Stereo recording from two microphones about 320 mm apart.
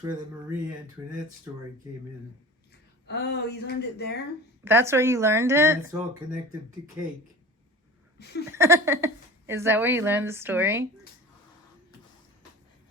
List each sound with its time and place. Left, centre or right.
0.0 s a woman's voice: centre
3.1 s speech: left
4.6 s a woman's voice: centre
8.2 s speech: left
8.5 s a woman's voice: centre